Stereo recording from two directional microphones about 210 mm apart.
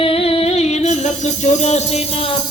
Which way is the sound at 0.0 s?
25° left (ahead or behind).